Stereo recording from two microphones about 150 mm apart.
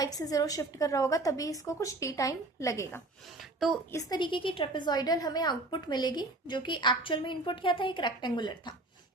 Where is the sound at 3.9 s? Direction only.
30° left (ahead or behind).